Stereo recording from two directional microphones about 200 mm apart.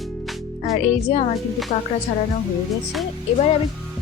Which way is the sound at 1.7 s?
35° left (ahead or behind).